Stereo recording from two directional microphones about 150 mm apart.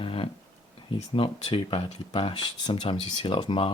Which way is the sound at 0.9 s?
35° left (ahead or behind).